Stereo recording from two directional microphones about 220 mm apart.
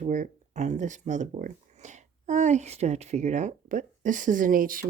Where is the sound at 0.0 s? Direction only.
35° right (ahead or behind).